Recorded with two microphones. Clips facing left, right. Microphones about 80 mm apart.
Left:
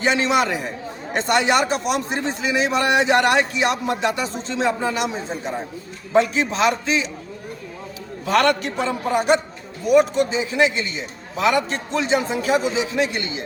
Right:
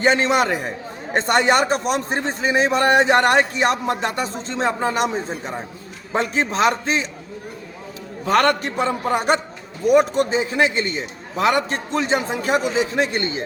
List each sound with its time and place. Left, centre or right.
0.0 s a man's voice: right
8.3 s a man's voice: right